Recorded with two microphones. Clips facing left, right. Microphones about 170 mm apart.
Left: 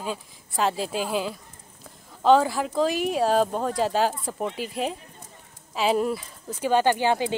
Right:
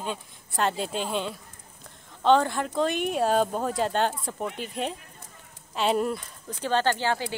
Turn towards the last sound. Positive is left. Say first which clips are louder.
# left 4 dB
turn(degrees=15)  # may be behind; listen again after turning